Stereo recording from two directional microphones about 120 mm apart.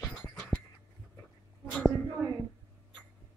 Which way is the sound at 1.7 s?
10° left (ahead or behind).